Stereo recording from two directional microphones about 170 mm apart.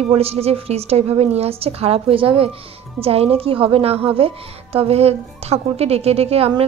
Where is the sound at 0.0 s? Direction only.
35° right (ahead or behind).